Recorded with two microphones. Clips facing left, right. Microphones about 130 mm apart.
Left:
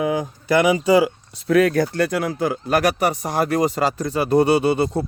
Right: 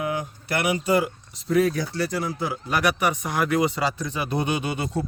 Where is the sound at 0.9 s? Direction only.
90° left.